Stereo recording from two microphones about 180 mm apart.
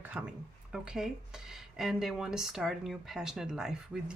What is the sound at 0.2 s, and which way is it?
Speech, 5° right (ahead or behind).